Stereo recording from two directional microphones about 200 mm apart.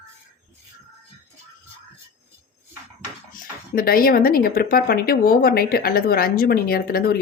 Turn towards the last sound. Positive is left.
turn(degrees=50)  # may be behind; listen again after turning